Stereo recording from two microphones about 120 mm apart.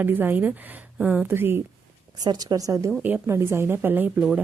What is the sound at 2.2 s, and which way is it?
A woman's voice, 30° right (ahead or behind).